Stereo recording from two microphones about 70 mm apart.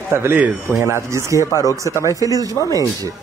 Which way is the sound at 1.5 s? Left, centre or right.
Left.